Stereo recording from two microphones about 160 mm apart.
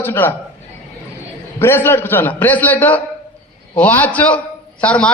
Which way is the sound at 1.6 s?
15° left (ahead or behind).